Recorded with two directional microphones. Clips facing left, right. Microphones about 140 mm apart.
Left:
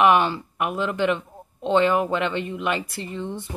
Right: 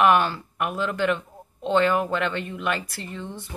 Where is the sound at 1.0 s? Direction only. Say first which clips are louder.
Left 1 dB; 20° left (ahead or behind).